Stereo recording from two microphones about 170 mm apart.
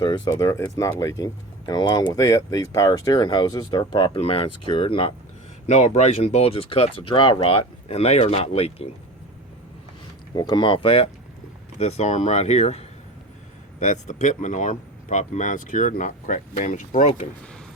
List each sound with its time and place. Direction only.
0.0 s speech: 25° left (ahead or behind)
5.6 s speech: 45° left (ahead or behind)
10.3 s speech: 25° left (ahead or behind); by 17.2 s 50° left (ahead or behind)